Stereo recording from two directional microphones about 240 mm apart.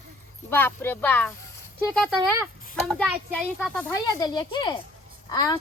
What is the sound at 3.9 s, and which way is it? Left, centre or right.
A woman's voice, centre.